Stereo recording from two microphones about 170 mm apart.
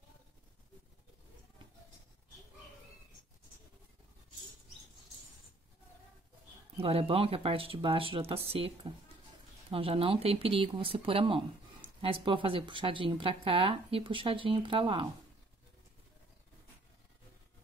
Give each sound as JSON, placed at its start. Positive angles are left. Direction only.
{"t": 6.8, "sound": "speech", "side_deg": -35}